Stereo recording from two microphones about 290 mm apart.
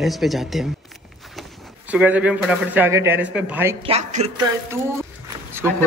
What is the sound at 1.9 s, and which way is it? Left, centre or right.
Speech, centre.